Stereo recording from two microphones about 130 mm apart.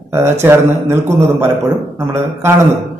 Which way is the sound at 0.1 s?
20° right (ahead or behind).